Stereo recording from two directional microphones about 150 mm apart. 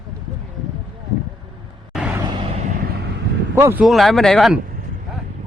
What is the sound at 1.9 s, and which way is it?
Vehicle, 5° right (ahead or behind).